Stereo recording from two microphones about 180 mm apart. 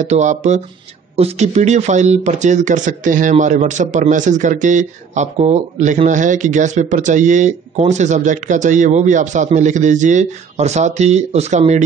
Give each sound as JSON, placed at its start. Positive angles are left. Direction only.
{"t": 0.0, "sound": "a man's voice", "side_deg": -40}